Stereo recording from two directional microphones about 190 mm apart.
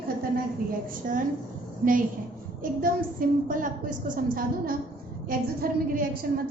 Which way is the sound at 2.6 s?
45° right (ahead or behind).